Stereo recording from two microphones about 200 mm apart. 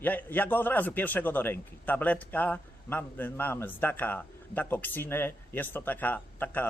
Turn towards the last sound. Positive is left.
turn(degrees=10)  # may be behind; listen again after turning